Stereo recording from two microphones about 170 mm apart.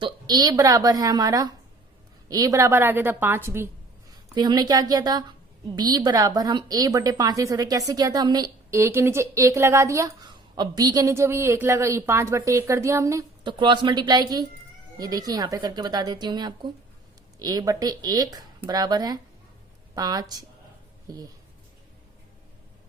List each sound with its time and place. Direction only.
0.0 s a woman's voice: 25° right (ahead or behind)